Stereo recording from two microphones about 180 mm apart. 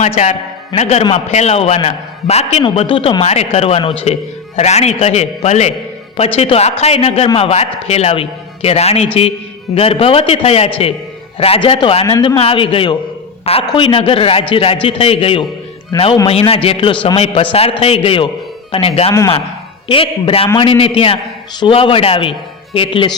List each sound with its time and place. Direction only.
0.8 s a man's voice: 40° left (ahead or behind)